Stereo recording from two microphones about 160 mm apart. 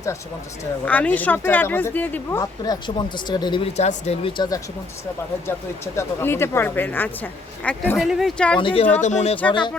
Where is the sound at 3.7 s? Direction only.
40° left (ahead or behind).